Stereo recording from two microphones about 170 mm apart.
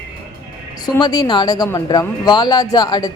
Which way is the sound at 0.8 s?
25° left (ahead or behind).